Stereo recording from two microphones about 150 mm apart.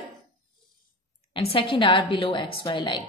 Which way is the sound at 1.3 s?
35° left (ahead or behind).